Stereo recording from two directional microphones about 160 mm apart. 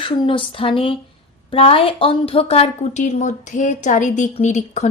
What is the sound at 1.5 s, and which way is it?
A woman's voice, 35° left (ahead or behind).